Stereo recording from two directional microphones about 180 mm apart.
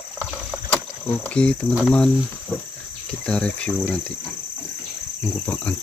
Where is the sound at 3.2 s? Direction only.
5° left (ahead or behind).